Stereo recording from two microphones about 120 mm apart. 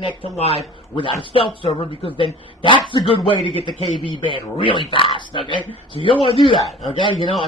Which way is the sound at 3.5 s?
50° left (ahead or behind).